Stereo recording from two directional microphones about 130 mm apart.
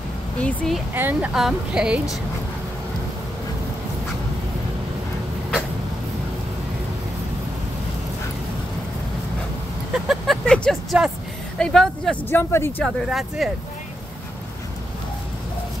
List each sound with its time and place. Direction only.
0.4 s speech: 10° left (ahead or behind)
0.9 s speech: 15° right (ahead or behind)
1.3 s speech: 5° right (ahead or behind)
9.9 s vehicle: 5° right (ahead or behind)
11.5 s speech: 5° left (ahead or behind)
12.3 s speech: 20° left (ahead or behind)
12.8 s speech: centre (ahead or behind)